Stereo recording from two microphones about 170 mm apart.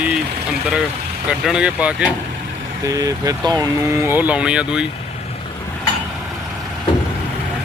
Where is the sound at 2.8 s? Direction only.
20° right (ahead or behind).